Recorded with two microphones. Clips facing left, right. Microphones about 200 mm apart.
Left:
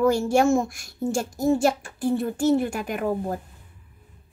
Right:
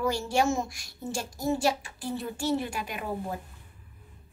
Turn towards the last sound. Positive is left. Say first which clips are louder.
# left 8 dB
turn(degrees=50)  # may be behind; listen again after turning